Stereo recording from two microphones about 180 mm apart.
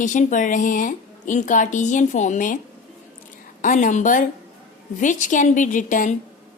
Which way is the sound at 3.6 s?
45° left (ahead or behind).